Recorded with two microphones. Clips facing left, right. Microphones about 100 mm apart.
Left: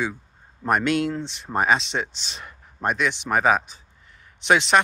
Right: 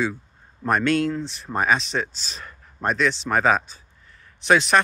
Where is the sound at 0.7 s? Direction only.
20° left (ahead or behind).